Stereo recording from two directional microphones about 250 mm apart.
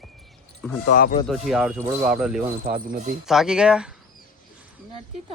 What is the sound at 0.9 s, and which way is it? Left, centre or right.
Speech, left.